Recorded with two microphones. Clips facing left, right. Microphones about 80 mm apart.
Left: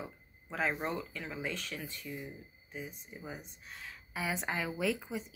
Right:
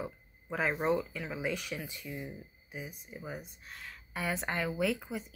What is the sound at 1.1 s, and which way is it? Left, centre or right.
Speech, centre.